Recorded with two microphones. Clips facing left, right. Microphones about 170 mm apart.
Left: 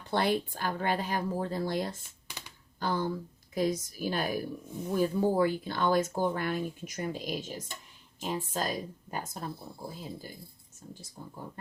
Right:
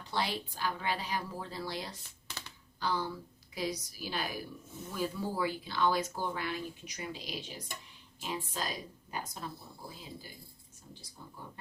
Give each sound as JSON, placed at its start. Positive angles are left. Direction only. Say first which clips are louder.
{"t": 0.0, "sound": "speech", "louder": "left 7 dB", "side_deg": 55}
{"t": 2.2, "sound": "computer keyboard", "louder": "even", "side_deg": 10}
{"t": 2.8, "sound": "speech", "louder": "left 4 dB", "side_deg": 50}